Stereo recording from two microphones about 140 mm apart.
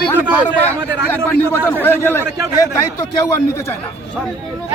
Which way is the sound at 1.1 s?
15° left (ahead or behind).